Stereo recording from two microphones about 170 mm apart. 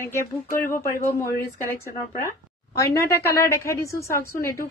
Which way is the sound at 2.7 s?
20° left (ahead or behind).